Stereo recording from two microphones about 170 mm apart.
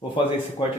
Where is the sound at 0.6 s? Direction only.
30° left (ahead or behind).